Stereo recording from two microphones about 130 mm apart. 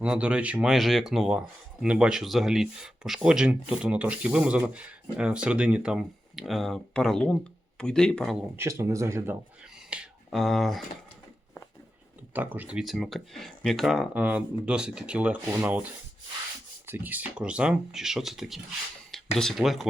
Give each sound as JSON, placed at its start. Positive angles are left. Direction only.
{"t": 0.0, "sound": "speech", "side_deg": -10}
{"t": 8.5, "sound": "speech", "side_deg": -20}
{"t": 9.9, "sound": "finger snapping", "side_deg": -5}
{"t": 12.3, "sound": "speech", "side_deg": -15}
{"t": 14.1, "sound": "speech", "side_deg": -10}